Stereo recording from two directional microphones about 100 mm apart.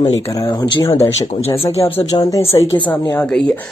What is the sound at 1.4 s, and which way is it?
Speech, 85° left.